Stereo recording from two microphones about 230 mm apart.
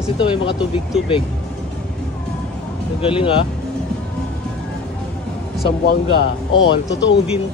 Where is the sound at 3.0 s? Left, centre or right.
Left.